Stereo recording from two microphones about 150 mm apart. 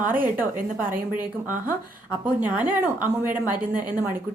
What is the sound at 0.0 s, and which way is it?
Speech, 65° right (ahead or behind).